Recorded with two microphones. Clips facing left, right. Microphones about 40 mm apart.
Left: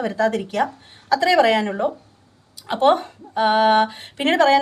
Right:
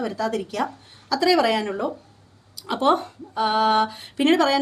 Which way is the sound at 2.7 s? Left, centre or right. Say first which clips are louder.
Left 3 dB; left.